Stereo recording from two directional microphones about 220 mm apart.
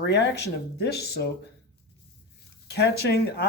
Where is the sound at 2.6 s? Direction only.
50° left (ahead or behind).